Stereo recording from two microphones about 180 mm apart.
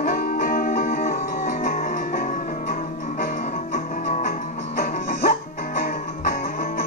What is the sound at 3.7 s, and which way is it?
Music, 45° left (ahead or behind).